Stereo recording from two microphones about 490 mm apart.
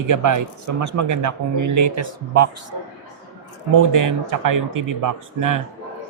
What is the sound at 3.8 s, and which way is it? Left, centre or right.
Speech, right.